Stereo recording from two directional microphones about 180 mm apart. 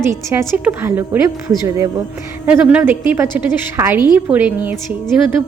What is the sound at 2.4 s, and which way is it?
A woman's voice, 5° right (ahead or behind).